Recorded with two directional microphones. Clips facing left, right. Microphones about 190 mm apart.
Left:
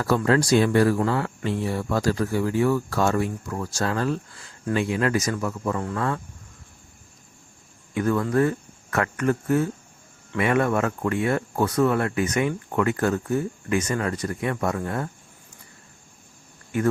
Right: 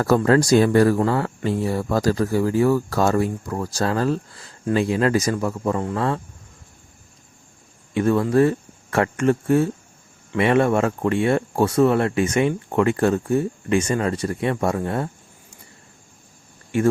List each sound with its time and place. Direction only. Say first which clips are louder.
0.0 s speech: right 4 dB; 40° right (ahead or behind)
7.9 s speech: right 4 dB; 25° right (ahead or behind)
16.7 s speech: right 4 dB; 25° right (ahead or behind)